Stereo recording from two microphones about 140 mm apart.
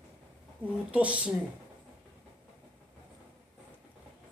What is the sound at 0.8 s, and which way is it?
Speech, 10° right (ahead or behind).